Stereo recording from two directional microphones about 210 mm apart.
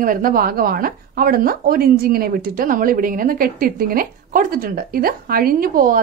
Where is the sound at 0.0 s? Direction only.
40° right (ahead or behind).